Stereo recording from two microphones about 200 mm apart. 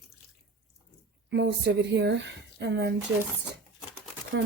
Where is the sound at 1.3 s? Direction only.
60° right (ahead or behind).